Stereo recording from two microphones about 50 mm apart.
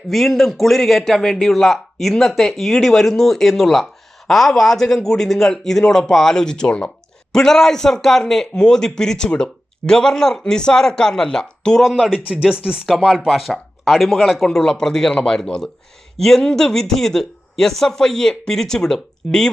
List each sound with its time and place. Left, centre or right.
0.1 s a man's voice: centre
12.3 s speech: centre
13.1 s a man's voice: centre
14.4 s speech: centre